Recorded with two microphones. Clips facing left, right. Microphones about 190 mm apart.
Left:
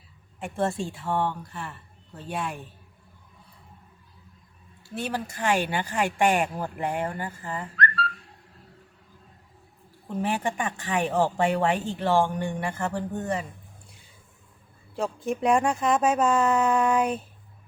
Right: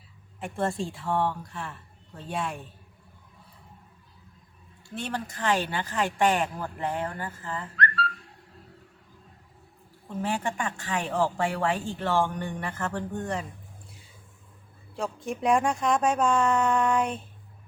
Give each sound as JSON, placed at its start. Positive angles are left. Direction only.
{"t": 0.3, "sound": "speech", "side_deg": 0}
{"t": 4.9, "sound": "speech", "side_deg": 5}
{"t": 10.2, "sound": "speech", "side_deg": 15}
{"t": 14.9, "sound": "speech", "side_deg": 0}